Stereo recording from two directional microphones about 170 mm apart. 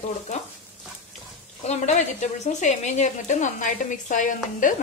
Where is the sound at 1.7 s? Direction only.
45° left (ahead or behind).